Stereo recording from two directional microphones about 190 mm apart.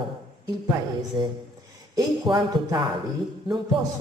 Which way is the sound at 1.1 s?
25° right (ahead or behind).